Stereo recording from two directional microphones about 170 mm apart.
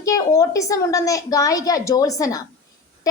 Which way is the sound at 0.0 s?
20° left (ahead or behind).